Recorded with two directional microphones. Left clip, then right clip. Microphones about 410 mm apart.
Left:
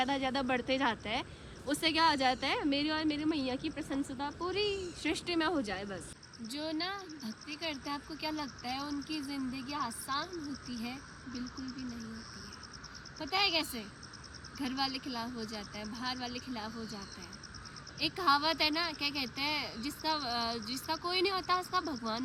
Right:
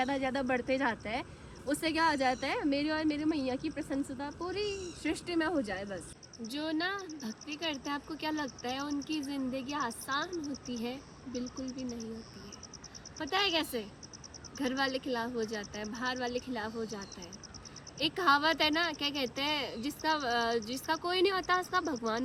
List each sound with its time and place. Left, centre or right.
0.0 s speech: centre
11.6 s speech: centre
13.3 s speech: centre
18.0 s speech: centre